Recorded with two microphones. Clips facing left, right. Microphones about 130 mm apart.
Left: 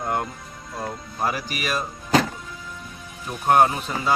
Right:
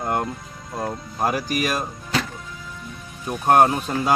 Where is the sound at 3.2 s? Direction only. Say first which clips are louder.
Right 2 dB; 35° right (ahead or behind).